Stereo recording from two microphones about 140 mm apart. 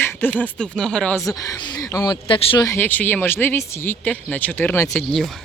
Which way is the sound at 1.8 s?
25° left (ahead or behind).